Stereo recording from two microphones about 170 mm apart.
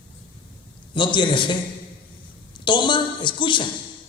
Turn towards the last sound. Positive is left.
turn(degrees=30)  # may be behind; listen again after turning